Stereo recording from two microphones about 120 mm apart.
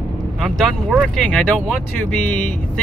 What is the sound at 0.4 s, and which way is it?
Speech, centre (ahead or behind).